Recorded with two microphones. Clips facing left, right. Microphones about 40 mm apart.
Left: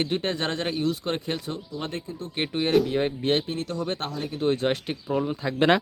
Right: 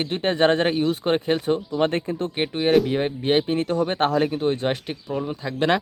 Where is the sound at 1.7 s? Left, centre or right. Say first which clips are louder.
Right 10 dB; right.